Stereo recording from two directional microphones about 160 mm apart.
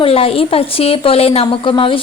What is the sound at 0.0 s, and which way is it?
Speech, 35° left (ahead or behind).